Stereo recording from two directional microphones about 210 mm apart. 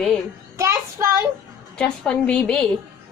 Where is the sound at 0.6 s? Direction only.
10° right (ahead or behind).